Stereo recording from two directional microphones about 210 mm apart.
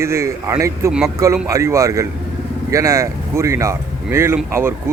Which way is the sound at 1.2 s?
15° right (ahead or behind).